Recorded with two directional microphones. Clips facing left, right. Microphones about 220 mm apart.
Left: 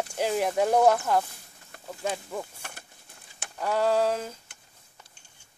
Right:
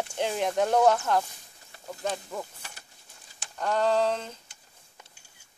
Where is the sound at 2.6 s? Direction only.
55° left (ahead or behind).